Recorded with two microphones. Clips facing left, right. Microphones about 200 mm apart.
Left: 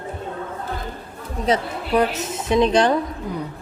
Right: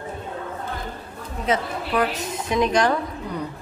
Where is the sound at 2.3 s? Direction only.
25° left (ahead or behind).